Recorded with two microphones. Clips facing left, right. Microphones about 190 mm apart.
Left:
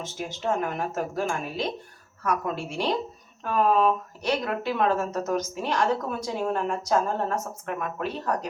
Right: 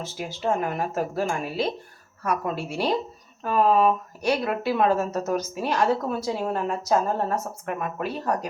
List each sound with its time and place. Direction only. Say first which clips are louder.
0.0 s speech: right 2 dB; 10° right (ahead or behind)